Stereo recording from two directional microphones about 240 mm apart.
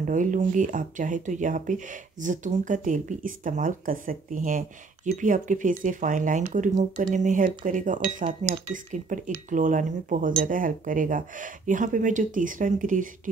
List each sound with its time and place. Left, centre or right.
0.0 s speech: right